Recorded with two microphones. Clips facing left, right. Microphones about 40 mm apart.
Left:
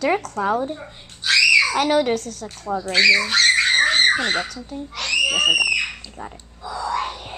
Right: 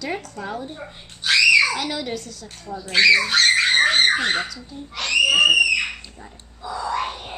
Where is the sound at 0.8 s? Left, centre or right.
Centre.